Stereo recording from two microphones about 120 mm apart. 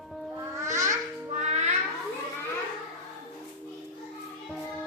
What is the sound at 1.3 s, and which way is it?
Music, 75° right (ahead or behind).